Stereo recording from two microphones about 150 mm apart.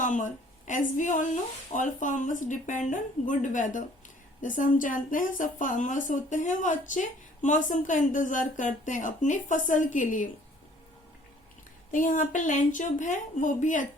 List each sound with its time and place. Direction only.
0.0 s a woman's voice: 55° left (ahead or behind)
11.9 s a woman's voice: 60° left (ahead or behind)